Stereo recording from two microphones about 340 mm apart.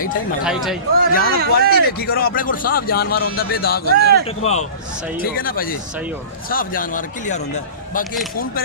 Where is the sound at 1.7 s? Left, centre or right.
Left.